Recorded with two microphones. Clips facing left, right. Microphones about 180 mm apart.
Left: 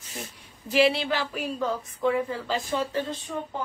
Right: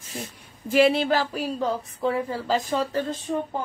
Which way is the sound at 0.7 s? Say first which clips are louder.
Right 3 dB; 50° right (ahead or behind).